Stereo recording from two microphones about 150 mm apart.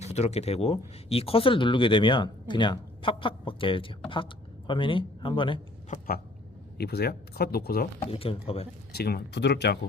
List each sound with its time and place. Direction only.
0.0 s speech: 45° left (ahead or behind)
6.7 s speech: 90° left
8.0 s speech: 40° left (ahead or behind)
8.9 s speech: 90° left